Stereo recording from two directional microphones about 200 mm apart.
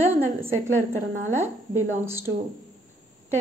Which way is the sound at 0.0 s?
10° right (ahead or behind).